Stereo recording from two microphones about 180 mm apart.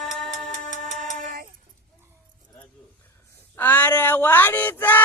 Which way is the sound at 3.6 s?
10° left (ahead or behind).